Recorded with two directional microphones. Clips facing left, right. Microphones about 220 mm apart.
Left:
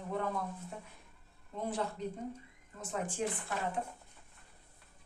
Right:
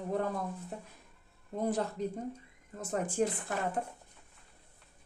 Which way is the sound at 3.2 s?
45° right (ahead or behind).